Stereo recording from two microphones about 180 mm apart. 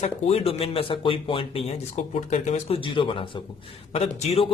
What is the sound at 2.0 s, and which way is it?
A man's voice, 40° left (ahead or behind).